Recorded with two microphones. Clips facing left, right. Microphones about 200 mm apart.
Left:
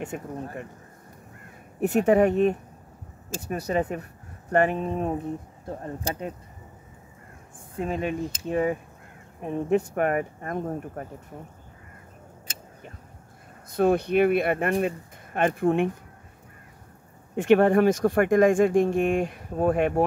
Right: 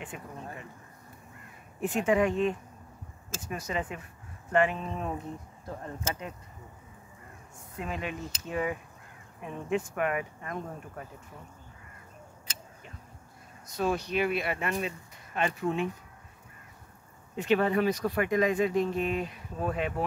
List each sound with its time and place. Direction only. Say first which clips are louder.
0.0 s speech: left 8 dB; 45° left (ahead or behind)
2.0 s speech: left 6 dB; 40° left (ahead or behind)
3.3 s speech: left 8 dB; 35° left (ahead or behind)
5.7 s speech: left 5 dB; 25° left (ahead or behind)
7.5 s speech: left 8 dB; 30° left (ahead or behind); by 11.4 s 45° left (ahead or behind)
13.7 s speech: left 8 dB; 55° left (ahead or behind)
17.4 s speech: left 7 dB; 50° left (ahead or behind)